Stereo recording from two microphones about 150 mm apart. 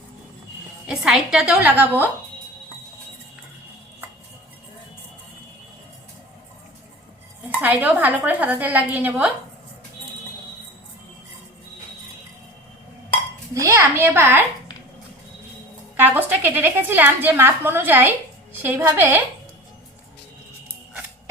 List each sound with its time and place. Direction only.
0.9 s a woman's voice: 5° right (ahead or behind)
7.5 s a woman's voice: 10° right (ahead or behind)
13.5 s a woman's voice: 20° right (ahead or behind)
16.0 s a woman's voice: 10° right (ahead or behind)